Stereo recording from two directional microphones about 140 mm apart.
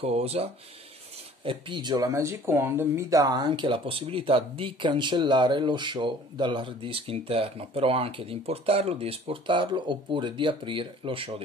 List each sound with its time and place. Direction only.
0.0 s speech: 45° right (ahead or behind)